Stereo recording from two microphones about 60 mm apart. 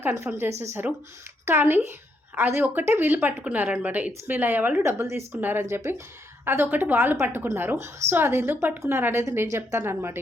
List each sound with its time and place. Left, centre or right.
0.0 s a woman's voice: right
4.8 s a woman's voice: right
5.4 s a woman's voice: right
5.6 s a woman's voice: right